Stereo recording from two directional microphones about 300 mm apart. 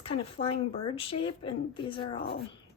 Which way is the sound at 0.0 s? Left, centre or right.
Centre.